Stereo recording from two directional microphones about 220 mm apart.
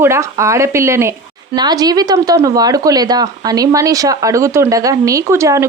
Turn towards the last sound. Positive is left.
turn(degrees=-15)  # may be behind; listen again after turning